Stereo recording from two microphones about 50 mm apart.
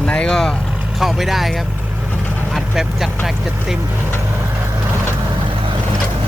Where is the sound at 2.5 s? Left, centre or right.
Centre.